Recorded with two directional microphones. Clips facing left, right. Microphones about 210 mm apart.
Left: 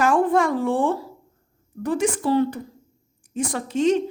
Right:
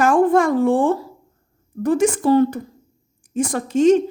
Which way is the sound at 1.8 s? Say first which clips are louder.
Right 5 dB; 45° right (ahead or behind).